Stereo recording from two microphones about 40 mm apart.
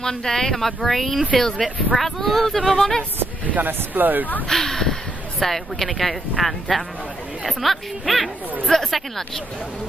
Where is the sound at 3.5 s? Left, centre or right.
Right.